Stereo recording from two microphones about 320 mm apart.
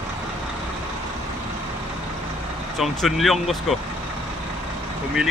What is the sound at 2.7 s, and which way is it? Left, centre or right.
Speech, centre.